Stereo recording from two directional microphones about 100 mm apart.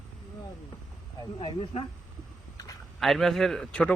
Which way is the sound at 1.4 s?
65° left (ahead or behind).